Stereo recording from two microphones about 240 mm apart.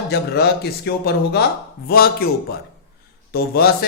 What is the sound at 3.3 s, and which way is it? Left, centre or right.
Speech, left.